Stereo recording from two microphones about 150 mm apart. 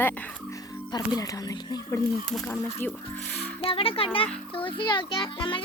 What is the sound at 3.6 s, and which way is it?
A child's voice, 40° left (ahead or behind).